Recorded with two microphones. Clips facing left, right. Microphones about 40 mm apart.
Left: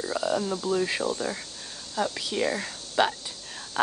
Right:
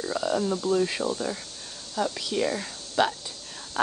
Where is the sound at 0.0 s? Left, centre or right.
Centre.